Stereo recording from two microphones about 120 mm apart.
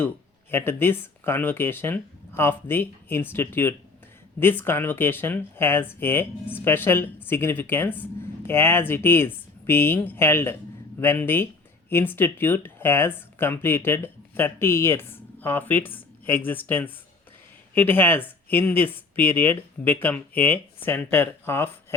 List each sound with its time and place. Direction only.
0.5 s speech: 20° left (ahead or behind)